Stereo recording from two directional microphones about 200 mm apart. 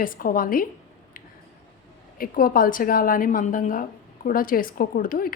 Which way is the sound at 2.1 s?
45° left (ahead or behind).